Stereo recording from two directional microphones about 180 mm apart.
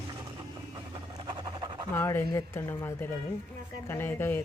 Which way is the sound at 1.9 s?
15° left (ahead or behind).